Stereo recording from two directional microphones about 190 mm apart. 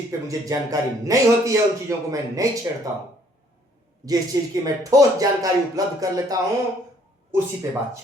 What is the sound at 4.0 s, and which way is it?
Speech, 20° right (ahead or behind).